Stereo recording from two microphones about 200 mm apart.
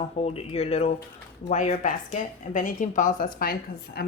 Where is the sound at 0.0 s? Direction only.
30° left (ahead or behind).